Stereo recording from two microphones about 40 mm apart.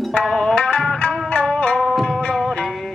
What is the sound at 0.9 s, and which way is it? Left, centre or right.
Music, left.